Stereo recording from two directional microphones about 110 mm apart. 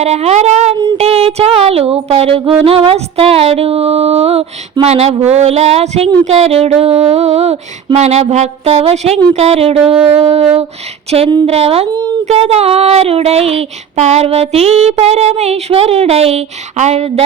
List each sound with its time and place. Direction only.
0.0 s speech: 80° right
0.9 s music: 65° right (ahead or behind)
5.2 s child singing: 80° right
11.4 s child singing: 65° right (ahead or behind)
11.9 s speech: 40° right (ahead or behind)
12.3 s child singing: 65° right (ahead or behind)